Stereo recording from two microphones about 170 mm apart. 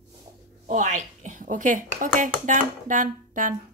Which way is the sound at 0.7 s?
45° right (ahead or behind).